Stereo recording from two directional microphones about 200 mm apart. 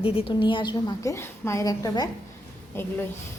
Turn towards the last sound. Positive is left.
turn(degrees=10)  # may be behind; listen again after turning